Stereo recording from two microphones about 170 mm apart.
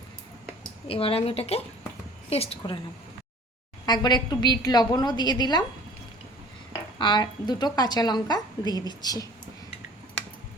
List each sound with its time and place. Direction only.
0.9 s a woman's voice: 35° left (ahead or behind)
3.8 s a woman's voice: 25° left (ahead or behind)
7.0 s a woman's voice: 25° left (ahead or behind)